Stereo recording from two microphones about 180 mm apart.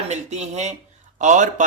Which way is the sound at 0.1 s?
40° right (ahead or behind).